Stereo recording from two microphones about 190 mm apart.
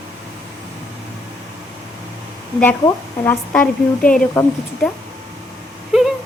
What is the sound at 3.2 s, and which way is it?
Speech, 10° left (ahead or behind).